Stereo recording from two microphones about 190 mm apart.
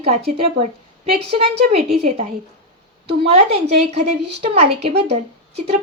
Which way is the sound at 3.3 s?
35° right (ahead or behind).